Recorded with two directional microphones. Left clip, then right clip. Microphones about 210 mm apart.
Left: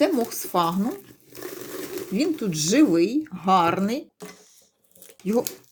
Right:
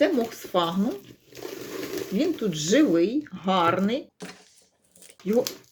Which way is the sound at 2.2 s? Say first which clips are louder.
Left 2 dB; 45° left (ahead or behind).